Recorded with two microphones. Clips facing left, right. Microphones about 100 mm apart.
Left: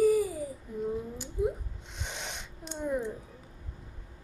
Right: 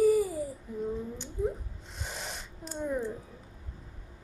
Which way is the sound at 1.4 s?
10° left (ahead or behind).